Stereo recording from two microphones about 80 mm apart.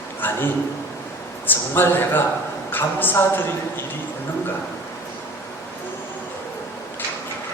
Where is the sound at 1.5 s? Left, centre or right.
Left.